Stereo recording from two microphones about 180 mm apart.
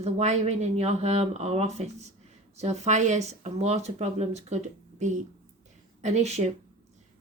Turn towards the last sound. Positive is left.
turn(degrees=-35)  # may be behind; listen again after turning